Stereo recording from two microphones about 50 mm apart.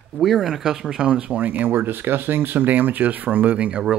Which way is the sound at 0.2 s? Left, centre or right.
Centre.